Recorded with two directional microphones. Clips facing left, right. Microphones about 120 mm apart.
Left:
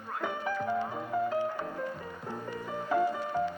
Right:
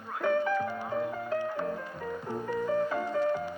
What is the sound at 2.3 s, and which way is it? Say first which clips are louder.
Music: right 3 dB; 15° right (ahead or behind).